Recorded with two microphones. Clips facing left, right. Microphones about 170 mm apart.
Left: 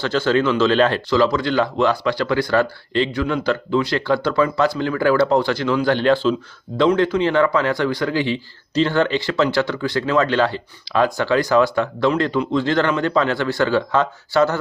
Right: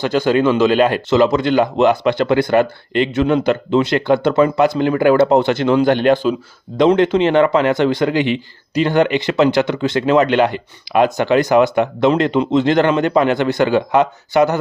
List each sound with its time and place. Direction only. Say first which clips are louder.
0.0 s speech: right 3 dB; 15° right (ahead or behind)